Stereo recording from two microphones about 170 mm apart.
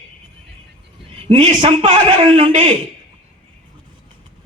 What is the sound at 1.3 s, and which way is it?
A man's voice, 30° right (ahead or behind).